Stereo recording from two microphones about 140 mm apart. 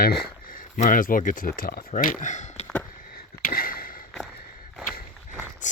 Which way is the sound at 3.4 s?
90° left.